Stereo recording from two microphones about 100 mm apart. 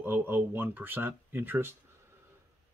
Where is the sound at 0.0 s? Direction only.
20° right (ahead or behind).